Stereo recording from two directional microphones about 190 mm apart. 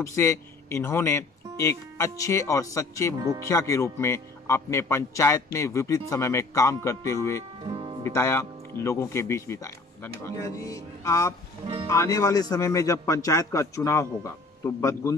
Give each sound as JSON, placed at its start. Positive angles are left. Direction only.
{"t": 0.1, "sound": "speech", "side_deg": 15}
{"t": 7.6, "sound": "music", "side_deg": -30}
{"t": 8.1, "sound": "speech", "side_deg": 15}